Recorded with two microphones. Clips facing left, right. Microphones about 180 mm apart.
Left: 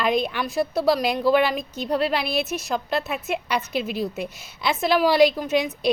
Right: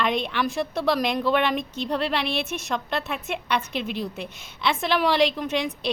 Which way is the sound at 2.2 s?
40° left (ahead or behind).